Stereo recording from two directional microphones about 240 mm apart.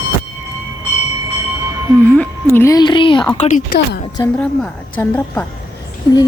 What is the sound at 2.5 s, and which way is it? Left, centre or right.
Speech, centre.